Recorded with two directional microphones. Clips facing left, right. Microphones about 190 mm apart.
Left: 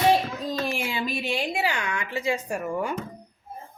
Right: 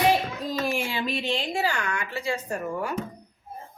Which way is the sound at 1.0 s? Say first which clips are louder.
Even; 10° left (ahead or behind).